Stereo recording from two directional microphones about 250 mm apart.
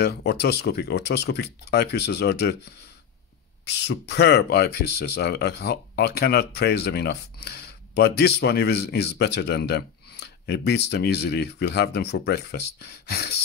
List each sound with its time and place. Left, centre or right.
0.0 s speech: left
3.6 s speech: left